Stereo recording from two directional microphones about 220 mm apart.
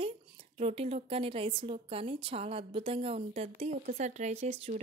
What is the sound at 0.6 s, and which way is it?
A woman's voice, 25° right (ahead or behind).